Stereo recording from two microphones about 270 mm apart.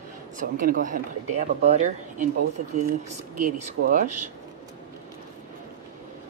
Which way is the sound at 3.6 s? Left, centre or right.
Right.